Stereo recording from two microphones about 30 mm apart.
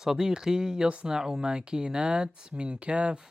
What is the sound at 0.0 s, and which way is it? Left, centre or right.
Speech, centre.